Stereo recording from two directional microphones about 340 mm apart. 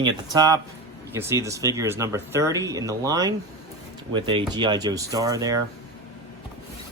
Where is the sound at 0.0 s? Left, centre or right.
Centre.